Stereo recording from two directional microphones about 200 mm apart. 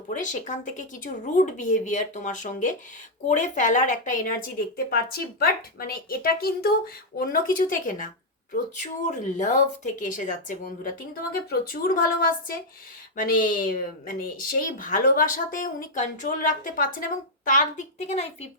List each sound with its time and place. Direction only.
0.1 s speech: 40° left (ahead or behind)